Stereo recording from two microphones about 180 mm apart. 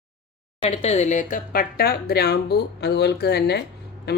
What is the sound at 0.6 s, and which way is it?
Speech, 40° left (ahead or behind).